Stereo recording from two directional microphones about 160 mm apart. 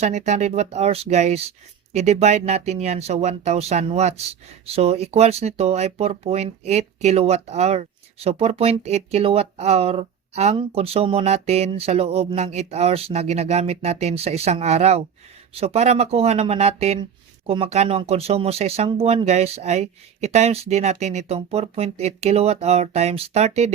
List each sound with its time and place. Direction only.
0.0 s speech: 45° right (ahead or behind)